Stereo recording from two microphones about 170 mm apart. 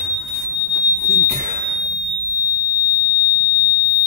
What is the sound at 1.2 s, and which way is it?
Smoke detector, 45° right (ahead or behind).